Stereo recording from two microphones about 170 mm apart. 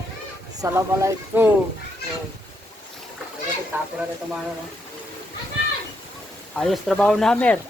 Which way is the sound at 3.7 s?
10° right (ahead or behind).